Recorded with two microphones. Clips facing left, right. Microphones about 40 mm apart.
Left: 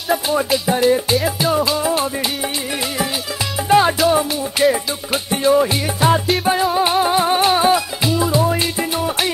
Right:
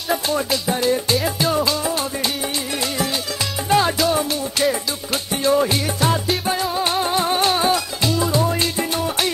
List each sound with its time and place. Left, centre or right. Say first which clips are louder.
0.3 s music: left 4 dB; centre
3.6 s music: left 4 dB; centre